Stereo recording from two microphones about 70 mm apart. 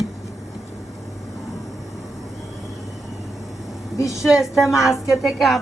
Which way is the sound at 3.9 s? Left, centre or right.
Left.